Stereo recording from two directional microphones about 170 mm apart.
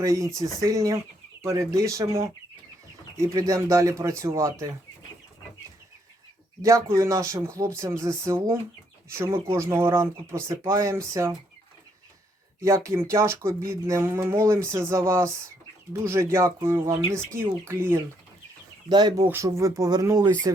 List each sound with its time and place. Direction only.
0.0 s speech: 20° right (ahead or behind)
6.6 s speech: 20° right (ahead or behind)
12.6 s speech: 15° right (ahead or behind)
18.9 s speech: 25° right (ahead or behind)